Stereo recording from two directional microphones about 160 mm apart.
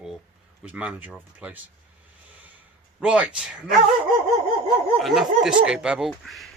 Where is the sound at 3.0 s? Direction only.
5° right (ahead or behind).